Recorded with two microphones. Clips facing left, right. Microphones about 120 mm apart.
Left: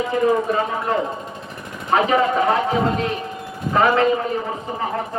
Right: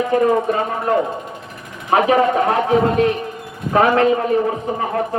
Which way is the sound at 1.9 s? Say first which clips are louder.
Right 3 dB; 55° right (ahead or behind).